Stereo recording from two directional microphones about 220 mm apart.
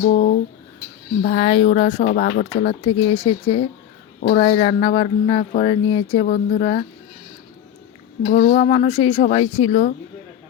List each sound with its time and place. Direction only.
0.0 s speech: 35° left (ahead or behind)
3.1 s speech: 25° left (ahead or behind)
6.6 s speech: 30° left (ahead or behind)
8.2 s speech: 40° left (ahead or behind)
8.9 s speech: 30° left (ahead or behind)